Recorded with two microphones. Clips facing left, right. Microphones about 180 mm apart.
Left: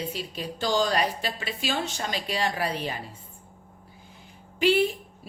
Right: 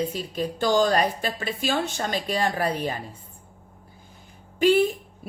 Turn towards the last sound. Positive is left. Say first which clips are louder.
# right 3 dB
turn(degrees=-45)  # may be behind; listen again after turning